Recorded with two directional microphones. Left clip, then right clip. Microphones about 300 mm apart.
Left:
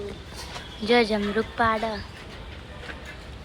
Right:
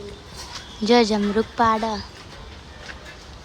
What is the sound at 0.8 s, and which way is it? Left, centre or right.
Speech, centre.